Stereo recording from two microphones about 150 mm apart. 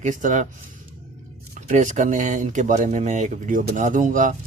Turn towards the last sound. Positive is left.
turn(degrees=-60)  # may be behind; listen again after turning